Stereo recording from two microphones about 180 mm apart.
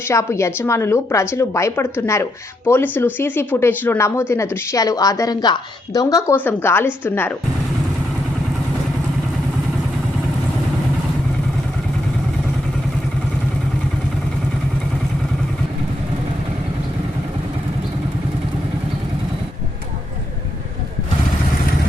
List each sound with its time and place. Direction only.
0.1 s a woman's voice: 15° left (ahead or behind)